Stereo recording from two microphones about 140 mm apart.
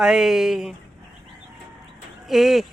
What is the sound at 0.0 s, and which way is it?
Speech, 5° right (ahead or behind).